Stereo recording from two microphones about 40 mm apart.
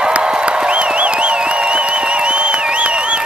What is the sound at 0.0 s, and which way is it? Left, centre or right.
Music, right.